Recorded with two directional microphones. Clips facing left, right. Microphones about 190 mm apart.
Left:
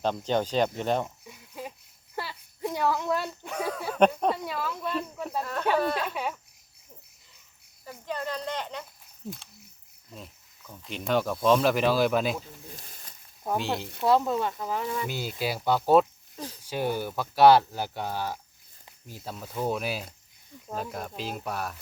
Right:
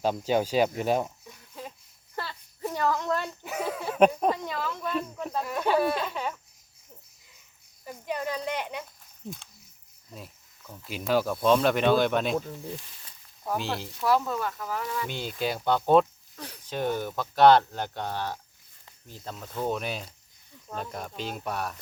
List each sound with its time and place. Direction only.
0.0 s speech: 10° right (ahead or behind)
1.3 s a sound: 10° left (ahead or behind)
3.4 s speech: 5° right (ahead or behind)
4.3 s speech: 5° left (ahead or behind)
5.4 s speech: 10° right (ahead or behind)
6.1 s speech: 10° left (ahead or behind)
7.9 s speech: 10° right (ahead or behind)
9.2 s speech: 5° left (ahead or behind)
12.7 s snake: 40° left (ahead or behind)
13.6 s speech: centre (ahead or behind)
14.0 s speech: 25° left (ahead or behind)
15.0 s speech: 5° left (ahead or behind)